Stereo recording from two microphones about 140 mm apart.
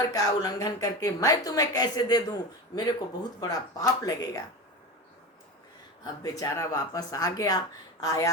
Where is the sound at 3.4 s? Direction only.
25° left (ahead or behind).